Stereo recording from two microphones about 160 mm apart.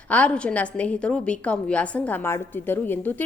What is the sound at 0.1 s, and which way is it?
A woman's voice, 10° left (ahead or behind).